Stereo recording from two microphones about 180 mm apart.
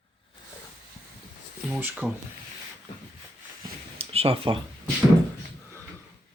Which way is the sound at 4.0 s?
30° right (ahead or behind).